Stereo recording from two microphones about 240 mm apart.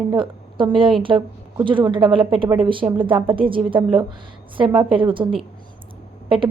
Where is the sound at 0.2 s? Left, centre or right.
Right.